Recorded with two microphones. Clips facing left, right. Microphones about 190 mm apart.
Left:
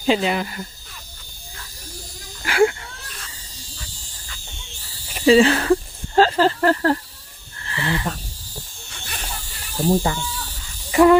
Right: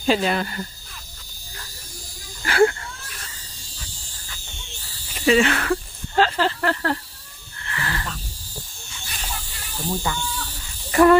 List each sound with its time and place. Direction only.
0.1 s speech: 15° left (ahead or behind)
2.4 s wheeze: 10° left (ahead or behind)
5.2 s speech: 30° left (ahead or behind)
7.6 s a sound: 30° left (ahead or behind)
8.9 s snake: 60° left (ahead or behind)
9.9 s speech: 35° left (ahead or behind)
10.9 s cricket: 15° left (ahead or behind)